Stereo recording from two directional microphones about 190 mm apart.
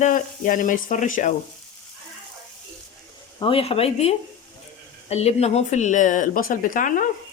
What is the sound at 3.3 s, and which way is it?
Speech, 30° left (ahead or behind).